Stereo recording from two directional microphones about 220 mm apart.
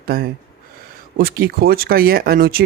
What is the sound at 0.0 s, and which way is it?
Speech, 40° right (ahead or behind).